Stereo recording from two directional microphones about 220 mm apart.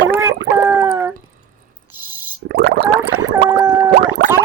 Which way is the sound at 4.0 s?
45° right (ahead or behind).